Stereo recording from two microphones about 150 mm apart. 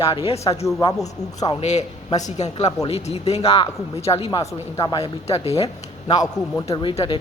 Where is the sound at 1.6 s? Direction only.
50° left (ahead or behind).